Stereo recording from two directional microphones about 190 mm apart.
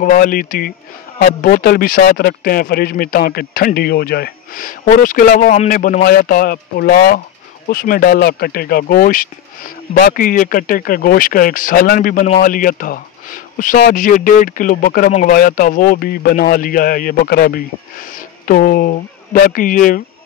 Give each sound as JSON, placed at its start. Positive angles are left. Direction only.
{"t": 0.0, "sound": "speech", "side_deg": 50}